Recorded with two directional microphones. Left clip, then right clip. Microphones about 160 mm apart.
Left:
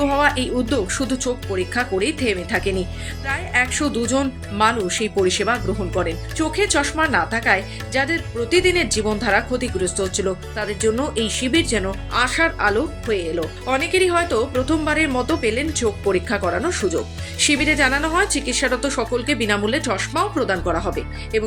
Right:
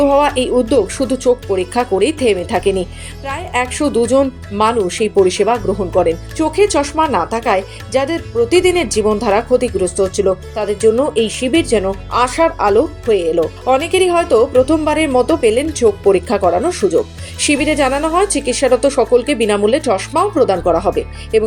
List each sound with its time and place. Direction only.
0.0 s music: 10° right (ahead or behind)
0.7 s a woman's voice: 10° right (ahead or behind)